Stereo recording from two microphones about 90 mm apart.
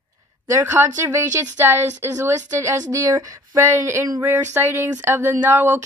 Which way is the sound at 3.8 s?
25° right (ahead or behind).